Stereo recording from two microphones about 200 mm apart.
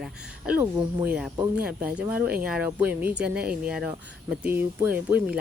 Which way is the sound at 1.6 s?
5° right (ahead or behind).